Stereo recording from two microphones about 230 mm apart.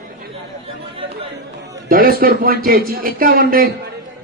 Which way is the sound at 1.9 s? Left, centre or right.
Right.